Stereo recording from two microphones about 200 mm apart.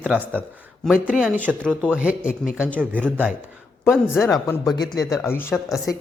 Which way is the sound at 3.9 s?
Centre (ahead or behind).